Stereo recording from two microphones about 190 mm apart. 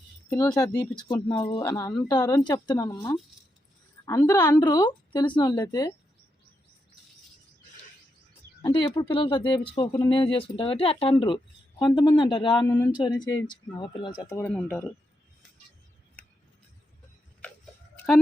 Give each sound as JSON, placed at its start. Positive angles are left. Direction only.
{"t": 0.3, "sound": "a woman's voice", "side_deg": 15}
{"t": 4.6, "sound": "speech", "side_deg": 20}
{"t": 8.6, "sound": "speech", "side_deg": 25}
{"t": 14.3, "sound": "a woman's voice", "side_deg": 10}